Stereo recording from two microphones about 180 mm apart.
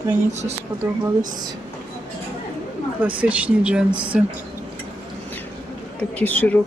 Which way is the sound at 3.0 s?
5° right (ahead or behind).